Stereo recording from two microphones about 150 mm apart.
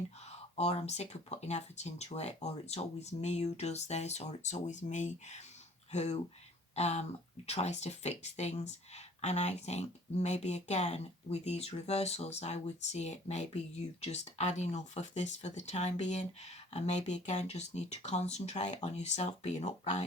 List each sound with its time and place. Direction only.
0.3 s speech: 45° left (ahead or behind)